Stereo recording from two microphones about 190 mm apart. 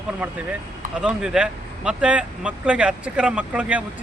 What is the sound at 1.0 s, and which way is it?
Speech, 5° right (ahead or behind).